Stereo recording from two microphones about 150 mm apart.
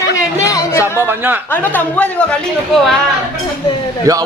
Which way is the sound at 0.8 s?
15° right (ahead or behind).